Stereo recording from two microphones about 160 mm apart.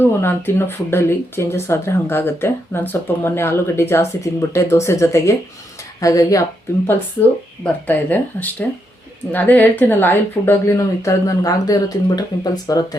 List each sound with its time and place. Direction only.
0.0 s speech: 15° left (ahead or behind)
7.6 s speech: 10° left (ahead or behind)